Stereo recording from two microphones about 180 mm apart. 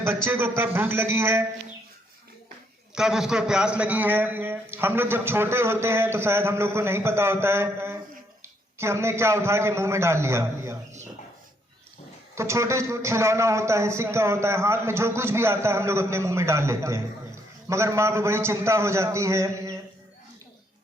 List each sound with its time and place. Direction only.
0.3 s a man's voice: 10° right (ahead or behind)
2.9 s a man's voice: 5° right (ahead or behind)
12.3 s a man's voice: 15° right (ahead or behind)